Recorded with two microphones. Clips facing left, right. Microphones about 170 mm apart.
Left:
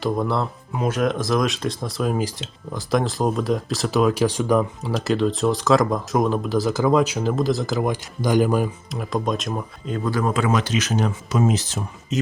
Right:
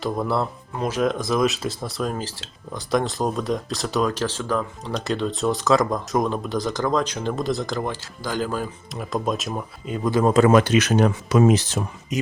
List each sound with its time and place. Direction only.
0.0 s speech: centre (ahead or behind); by 4.9 s 15° left (ahead or behind)
4.9 s speech: 5° left (ahead or behind)
8.9 s speech: centre (ahead or behind)
10.1 s speech: 20° right (ahead or behind)
10.3 s speech: 50° right (ahead or behind); by 11.8 s 65° right (ahead or behind)
12.1 s speech: 10° right (ahead or behind)